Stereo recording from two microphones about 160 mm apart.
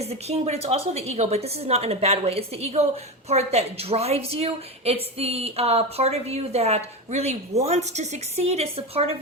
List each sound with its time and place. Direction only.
0.0 s a woman's voice: 40° right (ahead or behind)